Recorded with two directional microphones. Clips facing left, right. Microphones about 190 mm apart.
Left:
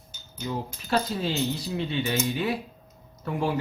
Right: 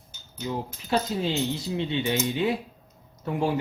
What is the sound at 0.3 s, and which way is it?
Speech, 20° right (ahead or behind).